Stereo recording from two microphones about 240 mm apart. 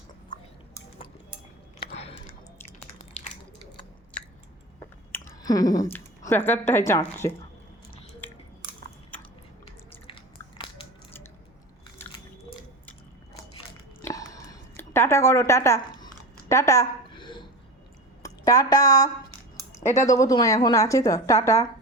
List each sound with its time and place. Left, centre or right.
1.8 s biting: left
5.1 s speech: centre
10.1 s biting: left
14.0 s a sound: centre
18.2 s a woman's voice: centre